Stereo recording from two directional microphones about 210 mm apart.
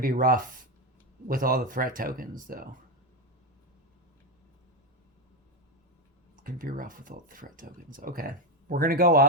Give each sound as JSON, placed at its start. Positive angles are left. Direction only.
{"t": 0.0, "sound": "speech", "side_deg": -40}
{"t": 6.4, "sound": "speech", "side_deg": -40}